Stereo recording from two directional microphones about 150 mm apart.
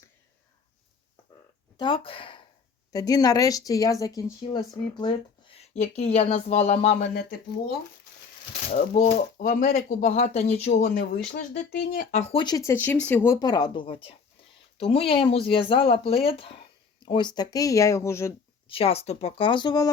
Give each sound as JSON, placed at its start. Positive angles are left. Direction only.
{"t": 1.8, "sound": "speech", "side_deg": 35}
{"t": 2.9, "sound": "speech", "side_deg": 25}
{"t": 8.7, "sound": "speech", "side_deg": 45}
{"t": 9.4, "sound": "speech", "side_deg": 90}
{"t": 9.7, "sound": "speech", "side_deg": 50}
{"t": 10.8, "sound": "speech", "side_deg": 90}
{"t": 11.9, "sound": "speech", "side_deg": 70}
{"t": 12.2, "sound": "speech", "side_deg": 35}
{"t": 12.7, "sound": "speech", "side_deg": 10}
{"t": 18.7, "sound": "speech", "side_deg": 40}